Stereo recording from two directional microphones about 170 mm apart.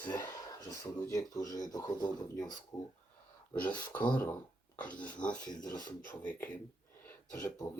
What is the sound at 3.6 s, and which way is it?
Speech, 10° left (ahead or behind).